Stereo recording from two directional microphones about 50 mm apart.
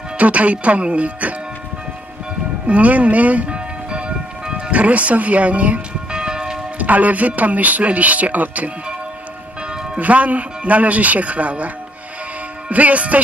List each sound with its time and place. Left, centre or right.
0.2 s speech: right
2.6 s music: right
6.1 s church bell: centre
6.8 s speech: right